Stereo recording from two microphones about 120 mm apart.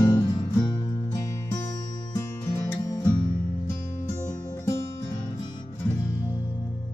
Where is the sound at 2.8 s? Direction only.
30° left (ahead or behind).